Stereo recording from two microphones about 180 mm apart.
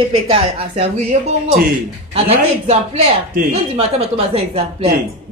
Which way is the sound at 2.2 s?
35° right (ahead or behind).